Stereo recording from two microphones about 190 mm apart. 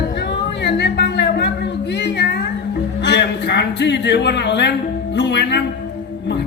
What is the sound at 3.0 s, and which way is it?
A man's voice, 65° left (ahead or behind).